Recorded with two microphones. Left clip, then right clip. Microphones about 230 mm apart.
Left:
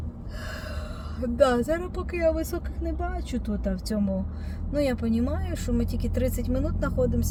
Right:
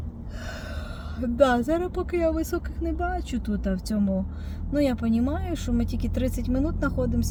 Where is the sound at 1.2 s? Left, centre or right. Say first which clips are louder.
Right 1 dB; right.